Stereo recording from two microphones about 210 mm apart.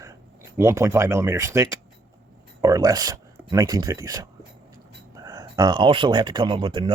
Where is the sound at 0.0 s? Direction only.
15° right (ahead or behind).